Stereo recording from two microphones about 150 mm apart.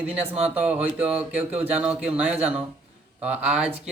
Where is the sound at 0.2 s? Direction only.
40° right (ahead or behind).